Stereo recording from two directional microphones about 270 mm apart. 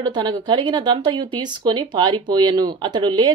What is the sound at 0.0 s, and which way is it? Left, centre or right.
Speech, centre.